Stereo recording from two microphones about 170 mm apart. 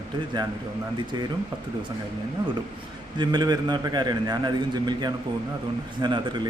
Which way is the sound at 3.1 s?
25° right (ahead or behind).